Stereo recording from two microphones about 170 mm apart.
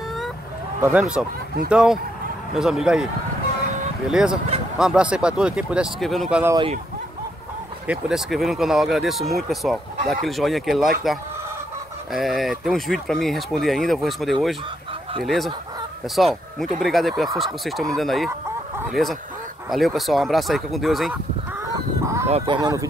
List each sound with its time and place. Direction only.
0.7 s speech: 15° right (ahead or behind)
1.7 s speech: 5° right (ahead or behind)
4.1 s speech: 5° right (ahead or behind)
7.8 s speech: 5° right (ahead or behind)
22.0 s honk: 15° right (ahead or behind)
22.6 s speech: 20° right (ahead or behind)